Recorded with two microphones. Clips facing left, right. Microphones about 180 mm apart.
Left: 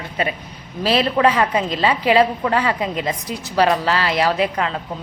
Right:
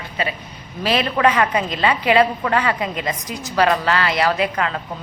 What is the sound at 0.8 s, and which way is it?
A woman's voice, 35° left (ahead or behind).